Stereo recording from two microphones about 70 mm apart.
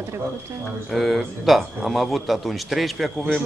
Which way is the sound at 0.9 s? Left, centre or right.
Centre.